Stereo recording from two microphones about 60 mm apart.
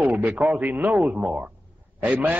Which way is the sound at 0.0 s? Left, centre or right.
Right.